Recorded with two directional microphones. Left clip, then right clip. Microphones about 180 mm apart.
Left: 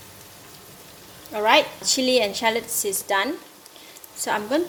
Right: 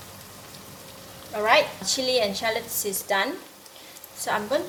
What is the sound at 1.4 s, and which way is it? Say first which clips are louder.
A woman's voice: left 2 dB; 55° left (ahead or behind).